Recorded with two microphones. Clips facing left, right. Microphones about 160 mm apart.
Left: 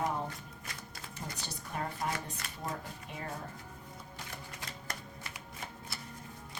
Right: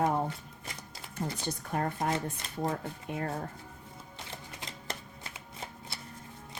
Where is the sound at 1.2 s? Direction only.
50° right (ahead or behind).